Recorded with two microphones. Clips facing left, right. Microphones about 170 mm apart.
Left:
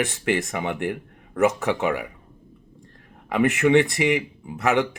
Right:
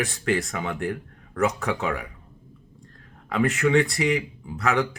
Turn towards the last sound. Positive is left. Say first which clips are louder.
# left 3 dB
turn(degrees=20)  # may be behind; listen again after turning